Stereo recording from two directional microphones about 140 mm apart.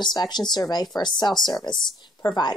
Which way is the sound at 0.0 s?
30° left (ahead or behind).